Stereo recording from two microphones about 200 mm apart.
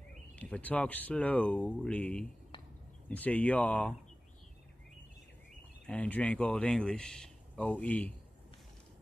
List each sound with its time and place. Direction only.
0.4 s speech: 5° left (ahead or behind)
2.5 s a sound: 25° left (ahead or behind)
3.1 s speech: 5° left (ahead or behind)
5.9 s speech: 10° left (ahead or behind)